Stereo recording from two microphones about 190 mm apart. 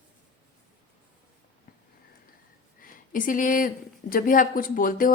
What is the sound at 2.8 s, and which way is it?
Speech, 45° left (ahead or behind).